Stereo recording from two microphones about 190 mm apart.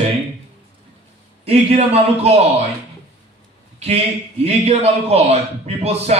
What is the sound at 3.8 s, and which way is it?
A man's voice, 35° right (ahead or behind).